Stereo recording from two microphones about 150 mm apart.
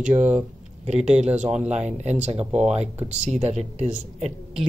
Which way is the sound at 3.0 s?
45° right (ahead or behind).